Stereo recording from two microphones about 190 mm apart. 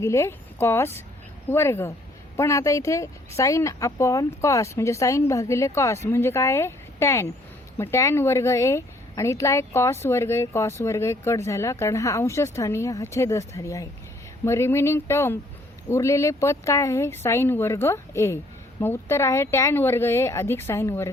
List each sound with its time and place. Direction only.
0.0 s a woman's voice: 15° left (ahead or behind)